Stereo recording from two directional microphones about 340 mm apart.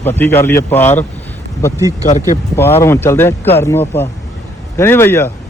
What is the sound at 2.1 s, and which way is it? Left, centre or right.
Speech, left.